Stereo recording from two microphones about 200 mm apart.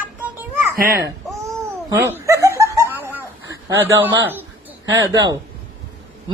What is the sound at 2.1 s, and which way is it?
Laughter, 15° right (ahead or behind).